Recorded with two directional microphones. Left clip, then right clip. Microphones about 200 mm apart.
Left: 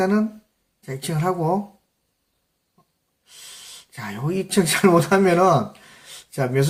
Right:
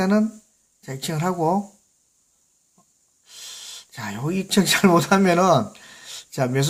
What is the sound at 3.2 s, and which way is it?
Speech, 40° right (ahead or behind).